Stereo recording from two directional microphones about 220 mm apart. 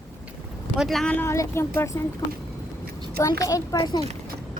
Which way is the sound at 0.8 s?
Centre (ahead or behind).